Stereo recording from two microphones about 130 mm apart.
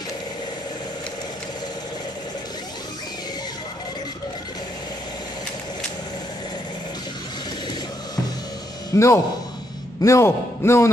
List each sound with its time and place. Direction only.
8.9 s a man's voice: 20° left (ahead or behind)